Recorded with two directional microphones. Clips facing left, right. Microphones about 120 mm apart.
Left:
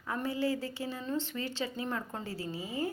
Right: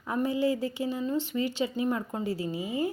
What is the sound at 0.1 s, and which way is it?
A woman's voice, 15° right (ahead or behind).